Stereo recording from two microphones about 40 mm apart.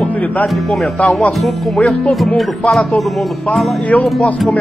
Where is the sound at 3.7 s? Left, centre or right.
Left.